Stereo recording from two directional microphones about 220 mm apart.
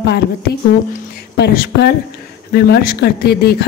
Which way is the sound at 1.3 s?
45° left (ahead or behind).